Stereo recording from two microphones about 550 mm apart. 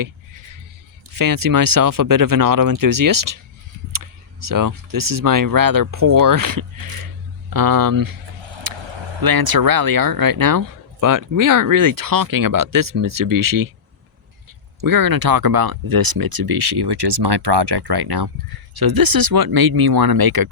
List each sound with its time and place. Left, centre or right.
1.1 s speech: right
8.8 s speech: right
14.8 s speech: right